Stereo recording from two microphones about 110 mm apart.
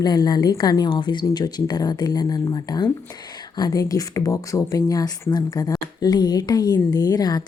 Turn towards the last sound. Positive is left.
turn(degrees=35)  # may be behind; listen again after turning